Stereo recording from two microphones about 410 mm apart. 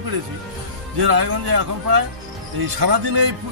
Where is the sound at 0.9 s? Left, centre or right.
Right.